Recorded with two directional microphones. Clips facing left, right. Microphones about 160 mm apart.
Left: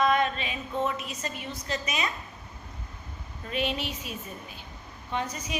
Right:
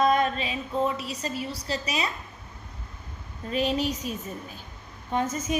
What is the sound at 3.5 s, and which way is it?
Speech, 40° right (ahead or behind).